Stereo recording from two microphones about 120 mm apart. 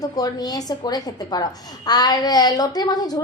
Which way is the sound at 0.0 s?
35° left (ahead or behind).